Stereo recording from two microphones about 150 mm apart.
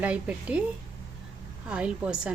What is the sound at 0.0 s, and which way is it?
Speech, 10° right (ahead or behind).